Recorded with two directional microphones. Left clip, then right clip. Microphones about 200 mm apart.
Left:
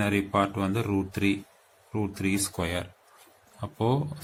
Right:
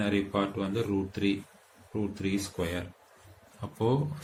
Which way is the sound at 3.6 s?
30° left (ahead or behind).